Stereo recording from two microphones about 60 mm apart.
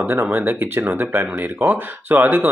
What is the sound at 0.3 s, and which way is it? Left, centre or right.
Speech, right.